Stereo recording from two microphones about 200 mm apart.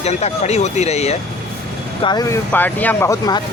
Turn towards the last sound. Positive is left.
turn(degrees=15)  # may be behind; listen again after turning